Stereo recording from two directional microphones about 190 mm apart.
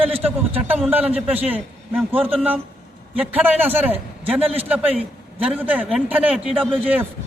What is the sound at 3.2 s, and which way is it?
Speech, 10° right (ahead or behind).